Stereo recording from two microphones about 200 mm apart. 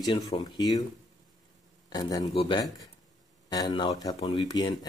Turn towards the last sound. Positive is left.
turn(degrees=20)  # may be behind; listen again after turning